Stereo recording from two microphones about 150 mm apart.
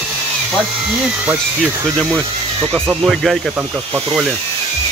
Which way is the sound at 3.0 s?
Centre (ahead or behind).